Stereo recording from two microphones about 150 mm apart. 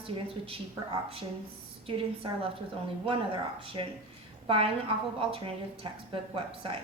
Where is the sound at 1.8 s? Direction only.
35° right (ahead or behind).